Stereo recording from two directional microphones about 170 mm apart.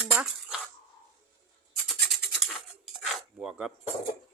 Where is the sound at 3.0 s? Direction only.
Centre (ahead or behind).